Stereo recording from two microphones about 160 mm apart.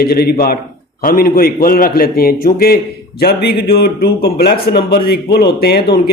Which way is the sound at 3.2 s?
80° left.